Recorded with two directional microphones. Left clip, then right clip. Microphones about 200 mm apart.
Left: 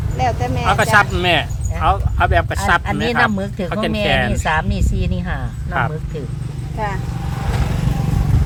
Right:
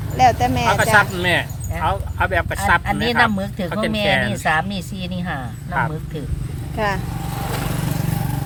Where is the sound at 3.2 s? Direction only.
5° left (ahead or behind).